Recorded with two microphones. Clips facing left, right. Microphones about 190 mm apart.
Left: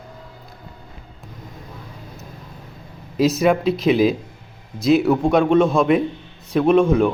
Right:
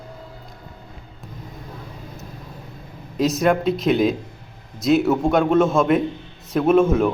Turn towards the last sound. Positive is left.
turn(degrees=0)  # may be behind; listen again after turning